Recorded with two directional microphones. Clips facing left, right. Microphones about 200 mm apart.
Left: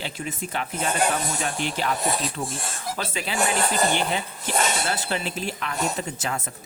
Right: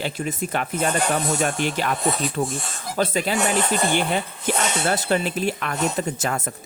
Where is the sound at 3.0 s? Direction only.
40° right (ahead or behind).